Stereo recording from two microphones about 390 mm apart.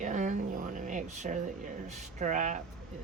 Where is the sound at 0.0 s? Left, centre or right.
Centre.